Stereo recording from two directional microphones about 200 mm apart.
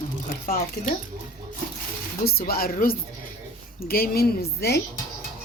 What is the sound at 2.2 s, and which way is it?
Speech, 50° left (ahead or behind).